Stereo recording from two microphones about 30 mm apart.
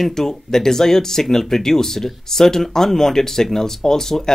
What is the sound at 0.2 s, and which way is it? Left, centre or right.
Speech, centre.